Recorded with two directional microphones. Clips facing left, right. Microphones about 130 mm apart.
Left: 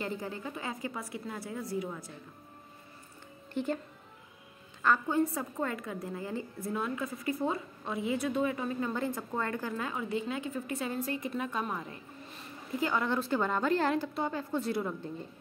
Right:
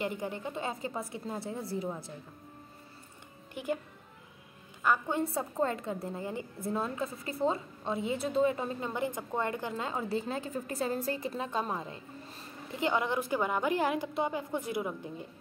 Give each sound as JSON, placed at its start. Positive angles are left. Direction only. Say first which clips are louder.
{"t": 0.0, "sound": "a woman's voice", "louder": "right 2 dB", "side_deg": -20}
{"t": 3.5, "sound": "a woman's voice", "louder": "left 2 dB", "side_deg": -10}
{"t": 4.8, "sound": "a woman's voice", "louder": "left 2 dB", "side_deg": -15}
{"t": 8.9, "sound": "a woman's voice", "louder": "even", "side_deg": -20}